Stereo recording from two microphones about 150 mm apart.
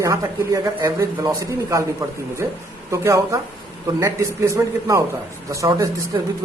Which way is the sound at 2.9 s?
20° right (ahead or behind).